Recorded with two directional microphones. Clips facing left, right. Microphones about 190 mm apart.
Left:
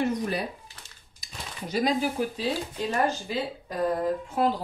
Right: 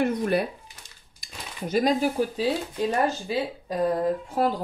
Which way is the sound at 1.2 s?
45° right (ahead or behind).